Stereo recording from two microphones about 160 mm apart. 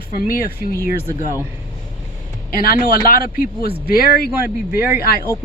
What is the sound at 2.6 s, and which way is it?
A man's voice, 65° left (ahead or behind).